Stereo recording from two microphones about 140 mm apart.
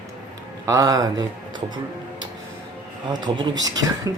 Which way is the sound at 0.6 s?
25° right (ahead or behind).